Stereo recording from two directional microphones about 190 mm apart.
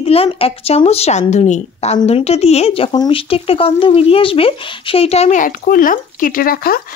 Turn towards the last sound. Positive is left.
turn(degrees=50)  # may be behind; listen again after turning